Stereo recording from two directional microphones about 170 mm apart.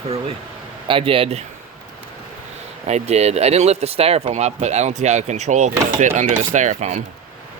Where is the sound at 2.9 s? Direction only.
40° right (ahead or behind).